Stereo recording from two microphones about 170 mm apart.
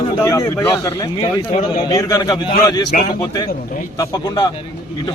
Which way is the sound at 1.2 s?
35° left (ahead or behind).